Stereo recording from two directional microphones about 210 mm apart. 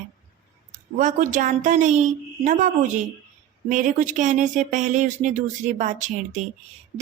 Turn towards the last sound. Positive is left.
turn(degrees=-35)  # may be behind; listen again after turning